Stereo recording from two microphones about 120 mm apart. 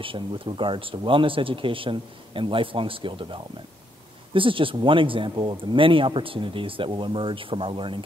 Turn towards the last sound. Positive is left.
turn(degrees=-45)  # may be behind; listen again after turning